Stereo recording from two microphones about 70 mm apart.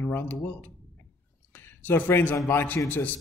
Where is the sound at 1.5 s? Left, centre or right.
Left.